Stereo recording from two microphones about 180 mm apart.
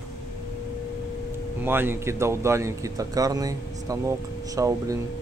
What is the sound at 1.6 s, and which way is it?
Speech, 10° right (ahead or behind).